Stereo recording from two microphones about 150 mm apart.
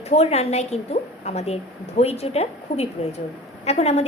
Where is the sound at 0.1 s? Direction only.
45° left (ahead or behind).